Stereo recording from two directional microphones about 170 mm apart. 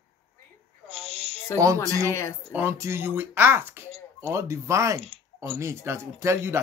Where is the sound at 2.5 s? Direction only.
15° right (ahead or behind).